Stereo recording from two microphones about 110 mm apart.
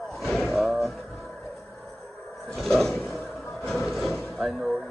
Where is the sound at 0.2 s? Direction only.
5° left (ahead or behind).